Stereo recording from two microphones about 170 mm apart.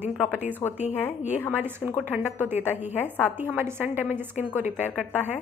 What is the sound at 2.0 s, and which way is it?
A woman's voice, 10° right (ahead or behind).